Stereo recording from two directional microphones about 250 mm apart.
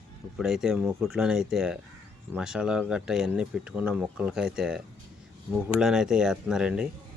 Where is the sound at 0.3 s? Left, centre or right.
Centre.